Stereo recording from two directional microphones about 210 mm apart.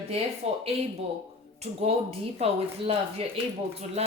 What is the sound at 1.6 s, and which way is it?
A woman's voice, 30° right (ahead or behind).